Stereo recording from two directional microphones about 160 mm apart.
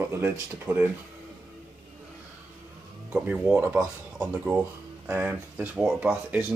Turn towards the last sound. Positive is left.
turn(degrees=-10)  # may be behind; listen again after turning